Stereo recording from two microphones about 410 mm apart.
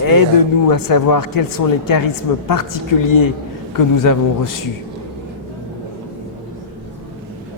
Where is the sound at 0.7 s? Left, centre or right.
Left.